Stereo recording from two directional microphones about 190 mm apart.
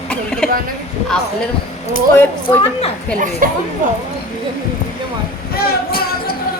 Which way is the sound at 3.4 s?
45° right (ahead or behind).